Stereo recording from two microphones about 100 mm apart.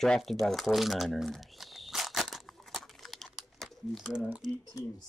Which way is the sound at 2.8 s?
Centre (ahead or behind).